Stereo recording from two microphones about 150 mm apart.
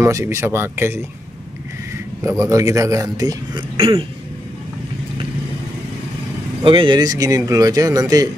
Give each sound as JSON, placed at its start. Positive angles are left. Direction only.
{"t": 0.0, "sound": "speech", "side_deg": -20}
{"t": 2.2, "sound": "speech", "side_deg": -20}
{"t": 3.7, "sound": "throat clearing", "side_deg": -40}
{"t": 6.6, "sound": "speech", "side_deg": -35}